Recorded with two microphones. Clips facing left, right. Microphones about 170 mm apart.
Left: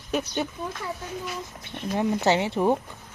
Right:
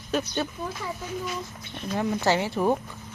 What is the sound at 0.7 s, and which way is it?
Speech, centre (ahead or behind).